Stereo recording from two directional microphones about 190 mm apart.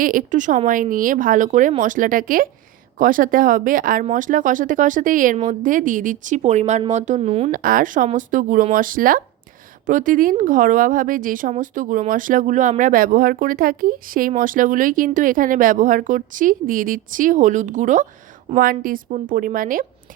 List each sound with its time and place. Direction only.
0.0 s a woman's voice: 45° right (ahead or behind)
7.5 s a woman's voice: 50° right (ahead or behind)